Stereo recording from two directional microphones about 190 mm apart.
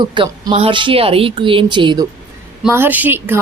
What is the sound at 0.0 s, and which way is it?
Speech, 25° right (ahead or behind).